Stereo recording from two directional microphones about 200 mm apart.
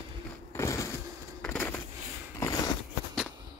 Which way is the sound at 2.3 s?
15° left (ahead or behind).